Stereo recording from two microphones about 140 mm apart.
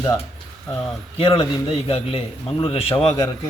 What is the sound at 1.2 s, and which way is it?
A man's voice, 40° left (ahead or behind).